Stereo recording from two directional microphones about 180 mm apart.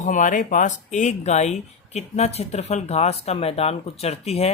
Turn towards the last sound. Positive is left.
turn(degrees=35)  # may be behind; listen again after turning